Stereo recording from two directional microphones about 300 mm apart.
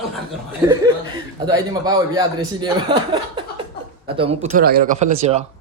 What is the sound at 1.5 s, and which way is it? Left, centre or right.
Speech, centre.